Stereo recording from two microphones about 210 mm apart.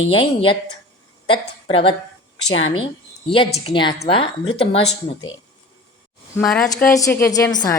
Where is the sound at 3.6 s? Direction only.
20° left (ahead or behind).